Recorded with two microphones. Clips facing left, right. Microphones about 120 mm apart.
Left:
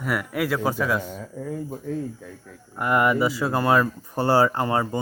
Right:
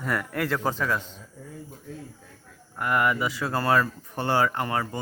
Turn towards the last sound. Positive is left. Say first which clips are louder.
# left 5 dB
turn(degrees=25)  # may be behind; listen again after turning